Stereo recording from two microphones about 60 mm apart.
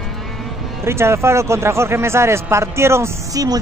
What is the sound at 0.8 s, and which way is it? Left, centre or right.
Speech, right.